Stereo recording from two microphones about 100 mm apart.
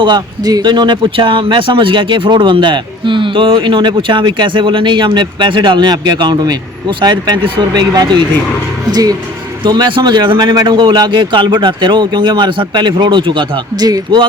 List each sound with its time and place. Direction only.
0.0 s speech: 45° right (ahead or behind)
8.9 s speech: 40° right (ahead or behind)